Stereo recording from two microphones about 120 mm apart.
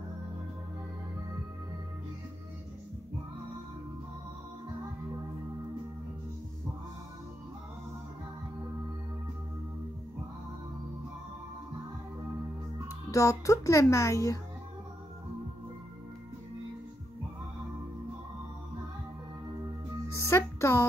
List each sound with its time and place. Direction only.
13.1 s speech: 25° left (ahead or behind)
20.2 s music: 20° left (ahead or behind)